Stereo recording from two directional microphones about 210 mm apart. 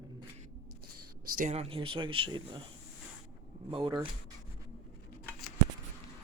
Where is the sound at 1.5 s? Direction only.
30° right (ahead or behind).